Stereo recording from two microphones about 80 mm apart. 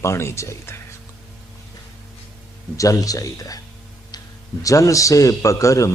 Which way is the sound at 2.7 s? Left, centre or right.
Left.